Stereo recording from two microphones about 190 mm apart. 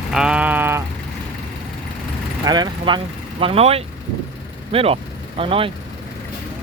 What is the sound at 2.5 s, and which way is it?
Speech, 25° right (ahead or behind).